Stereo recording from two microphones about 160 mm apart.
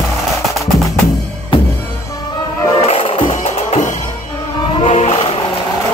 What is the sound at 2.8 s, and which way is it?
Music, 45° left (ahead or behind).